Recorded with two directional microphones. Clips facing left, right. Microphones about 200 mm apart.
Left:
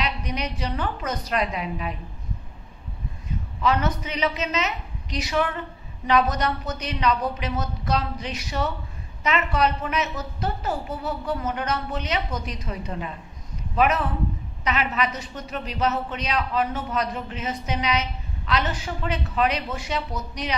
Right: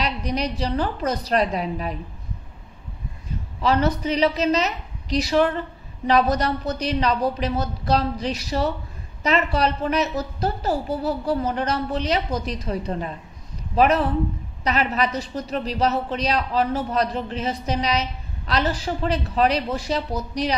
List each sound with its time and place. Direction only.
0.0 s a woman's voice: 35° right (ahead or behind)
3.6 s a woman's voice: 35° right (ahead or behind)